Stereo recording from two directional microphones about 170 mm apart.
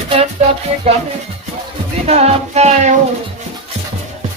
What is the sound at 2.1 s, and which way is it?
Music, 40° right (ahead or behind).